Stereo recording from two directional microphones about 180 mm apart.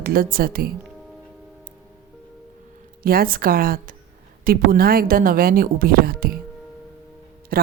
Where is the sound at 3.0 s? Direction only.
55° right (ahead or behind).